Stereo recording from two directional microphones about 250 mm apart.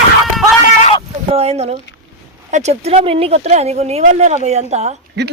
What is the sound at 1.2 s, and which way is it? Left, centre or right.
Speech, right.